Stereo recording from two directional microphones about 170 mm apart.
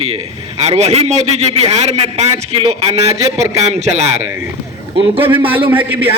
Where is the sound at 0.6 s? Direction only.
40° right (ahead or behind).